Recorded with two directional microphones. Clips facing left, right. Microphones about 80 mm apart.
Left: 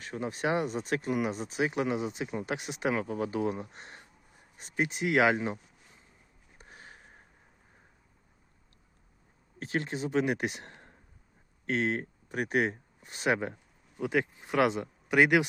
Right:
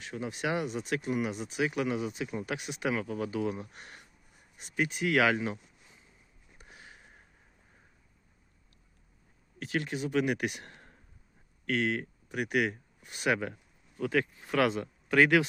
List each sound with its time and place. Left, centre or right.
0.0 s speech: left
6.6 s sniff: left
9.6 s speech: left